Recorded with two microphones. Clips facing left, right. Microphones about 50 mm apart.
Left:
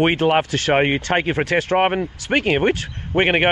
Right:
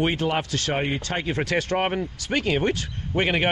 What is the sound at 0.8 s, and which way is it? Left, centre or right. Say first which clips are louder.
Speech: left 8 dB; left.